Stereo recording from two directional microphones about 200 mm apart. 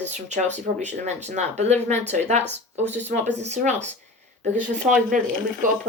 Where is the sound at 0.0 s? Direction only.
35° right (ahead or behind).